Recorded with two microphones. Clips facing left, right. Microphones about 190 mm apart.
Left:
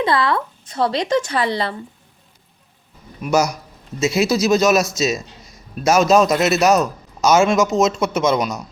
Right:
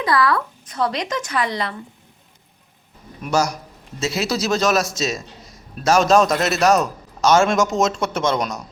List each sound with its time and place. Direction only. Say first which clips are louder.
0.0 s speech: left 1 dB; 25° left (ahead or behind)
3.2 s a man's voice: left 3 dB; 10° left (ahead or behind)